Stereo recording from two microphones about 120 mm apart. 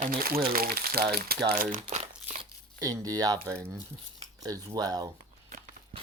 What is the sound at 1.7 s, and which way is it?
Speech, 70° right (ahead or behind).